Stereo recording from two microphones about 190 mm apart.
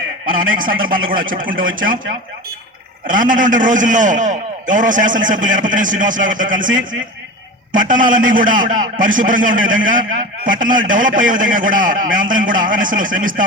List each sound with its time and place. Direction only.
0.3 s a man's voice: 45° right (ahead or behind)
3.1 s a man's voice: 45° right (ahead or behind)
7.7 s a man's voice: 45° right (ahead or behind)